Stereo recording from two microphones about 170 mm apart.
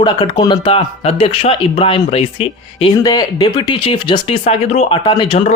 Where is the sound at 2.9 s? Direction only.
20° left (ahead or behind).